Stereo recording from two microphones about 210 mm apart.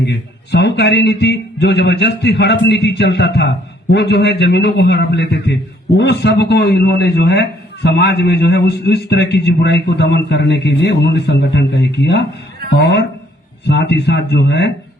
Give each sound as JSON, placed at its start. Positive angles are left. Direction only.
{"t": 0.0, "sound": "a man's voice", "side_deg": 55}